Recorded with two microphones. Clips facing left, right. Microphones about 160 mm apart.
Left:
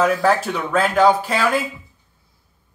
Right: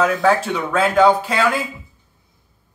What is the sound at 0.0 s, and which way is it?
Speech, centre (ahead or behind).